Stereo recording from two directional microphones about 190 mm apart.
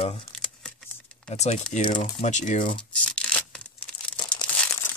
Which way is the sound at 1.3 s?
35° left (ahead or behind).